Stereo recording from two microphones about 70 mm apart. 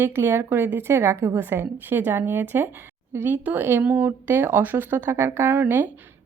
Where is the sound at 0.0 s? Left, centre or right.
Right.